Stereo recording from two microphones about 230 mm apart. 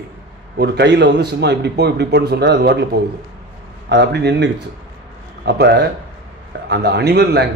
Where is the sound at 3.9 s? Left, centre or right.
Right.